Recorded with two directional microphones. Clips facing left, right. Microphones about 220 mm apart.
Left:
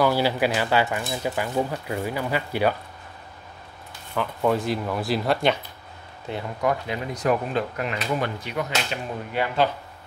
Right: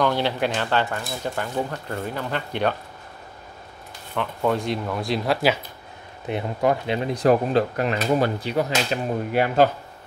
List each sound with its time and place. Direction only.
0.0 s speech: 5° left (ahead or behind)
4.1 s speech: centre (ahead or behind)
6.2 s speech: 20° right (ahead or behind); by 9.7 s 45° right (ahead or behind)